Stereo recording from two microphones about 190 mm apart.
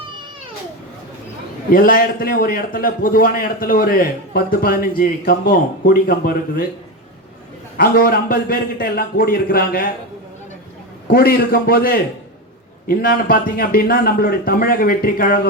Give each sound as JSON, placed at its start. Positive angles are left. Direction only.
{"t": 1.7, "sound": "a man's voice", "side_deg": 50}
{"t": 7.8, "sound": "a man's voice", "side_deg": 50}
{"t": 11.1, "sound": "a man's voice", "side_deg": 50}